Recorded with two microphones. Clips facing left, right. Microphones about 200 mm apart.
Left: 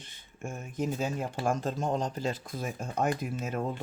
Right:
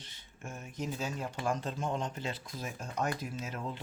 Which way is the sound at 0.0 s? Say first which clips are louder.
Left 6 dB; 50° left (ahead or behind).